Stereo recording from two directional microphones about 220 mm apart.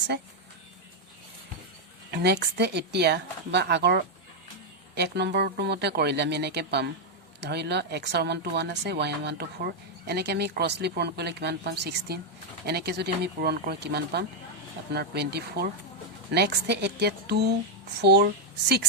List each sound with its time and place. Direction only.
2.0 s speech: 50° right (ahead or behind)